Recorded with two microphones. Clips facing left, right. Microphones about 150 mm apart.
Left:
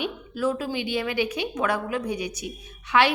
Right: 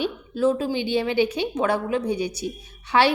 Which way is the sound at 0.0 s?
25° right (ahead or behind).